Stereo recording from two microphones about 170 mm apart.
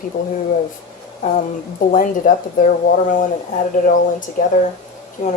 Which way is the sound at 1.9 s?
50° left (ahead or behind).